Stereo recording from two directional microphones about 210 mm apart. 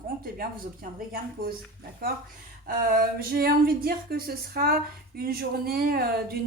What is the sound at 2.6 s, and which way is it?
Speech, 45° right (ahead or behind).